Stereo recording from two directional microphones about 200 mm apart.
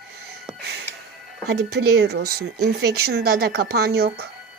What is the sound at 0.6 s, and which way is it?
Music, 55° right (ahead or behind).